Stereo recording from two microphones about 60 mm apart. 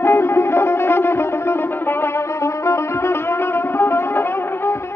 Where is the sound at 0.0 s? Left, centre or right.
Left.